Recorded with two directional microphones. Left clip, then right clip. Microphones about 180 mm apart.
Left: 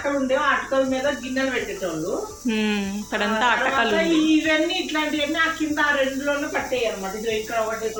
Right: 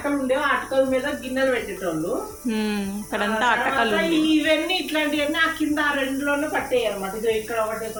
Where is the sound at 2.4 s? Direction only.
Centre (ahead or behind).